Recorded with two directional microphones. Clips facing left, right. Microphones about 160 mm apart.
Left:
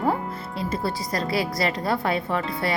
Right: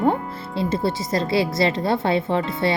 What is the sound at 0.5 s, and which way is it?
A woman's voice, 25° right (ahead or behind).